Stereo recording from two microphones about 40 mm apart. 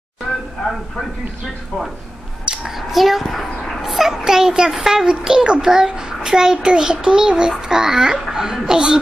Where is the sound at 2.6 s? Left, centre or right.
Centre.